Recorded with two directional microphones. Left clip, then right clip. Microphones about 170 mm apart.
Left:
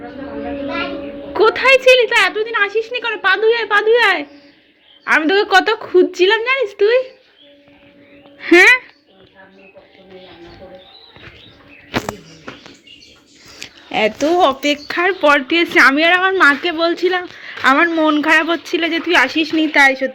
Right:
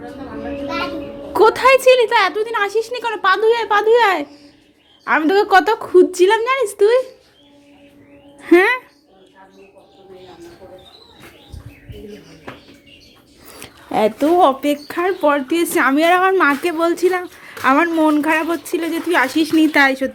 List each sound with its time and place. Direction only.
1.3 s a woman's voice: 25° right (ahead or behind)
8.4 s speech: 15° right (ahead or behind)
13.6 s speech: 20° right (ahead or behind)
16.0 s speech: 20° right (ahead or behind)